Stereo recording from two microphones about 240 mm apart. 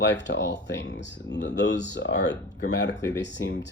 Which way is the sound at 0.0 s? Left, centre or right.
Left.